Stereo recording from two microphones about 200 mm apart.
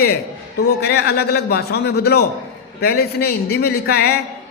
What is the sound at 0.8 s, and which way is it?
Speech, 50° left (ahead or behind).